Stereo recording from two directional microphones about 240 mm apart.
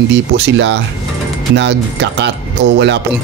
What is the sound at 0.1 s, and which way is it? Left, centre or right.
Speech, right.